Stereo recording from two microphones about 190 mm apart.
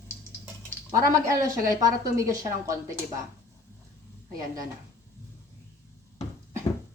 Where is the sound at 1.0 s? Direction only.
15° right (ahead or behind).